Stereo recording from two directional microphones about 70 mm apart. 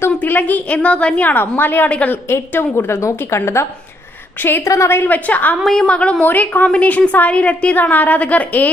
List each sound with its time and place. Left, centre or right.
0.2 s a woman's voice: left
2.2 s a woman's voice: left
4.6 s a woman's voice: left
5.0 s a woman's voice: left
5.6 s a woman's voice: centre
5.9 s a woman's voice: centre